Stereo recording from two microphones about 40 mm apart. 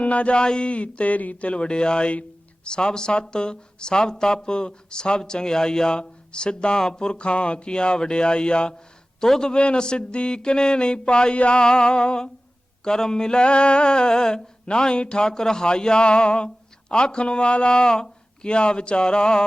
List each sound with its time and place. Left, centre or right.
0.0 s speech: left
9.2 s a man's voice: centre